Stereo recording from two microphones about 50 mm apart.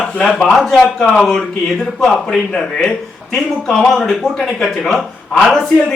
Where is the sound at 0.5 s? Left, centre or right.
Centre.